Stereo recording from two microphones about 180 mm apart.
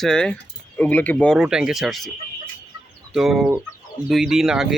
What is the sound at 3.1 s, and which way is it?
Speech, centre (ahead or behind).